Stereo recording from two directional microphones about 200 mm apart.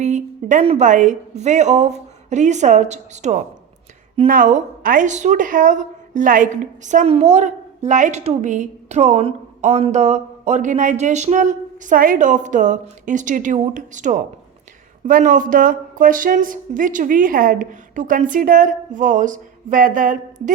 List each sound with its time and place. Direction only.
0.0 s a woman's voice: 35° right (ahead or behind)